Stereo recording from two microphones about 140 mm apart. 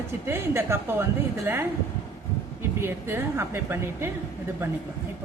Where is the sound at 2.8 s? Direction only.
15° right (ahead or behind).